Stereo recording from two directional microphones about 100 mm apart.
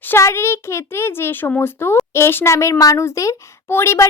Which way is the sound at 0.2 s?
25° left (ahead or behind).